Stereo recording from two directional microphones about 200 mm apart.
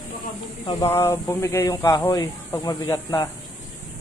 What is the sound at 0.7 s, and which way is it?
Speech, 15° left (ahead or behind).